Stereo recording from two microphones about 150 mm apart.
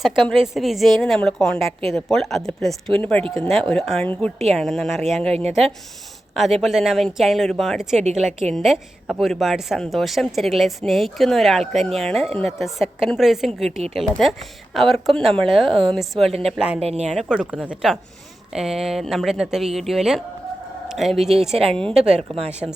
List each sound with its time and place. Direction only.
0.0 s speech: centre (ahead or behind)
16.8 s speech: 45° right (ahead or behind)
17.1 s speech: 5° right (ahead or behind)
22.0 s speech: 45° right (ahead or behind)